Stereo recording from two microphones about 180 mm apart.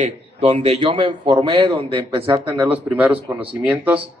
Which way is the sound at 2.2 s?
10° right (ahead or behind).